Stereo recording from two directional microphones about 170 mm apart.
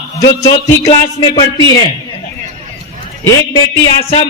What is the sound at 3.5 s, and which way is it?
Speech, 30° left (ahead or behind).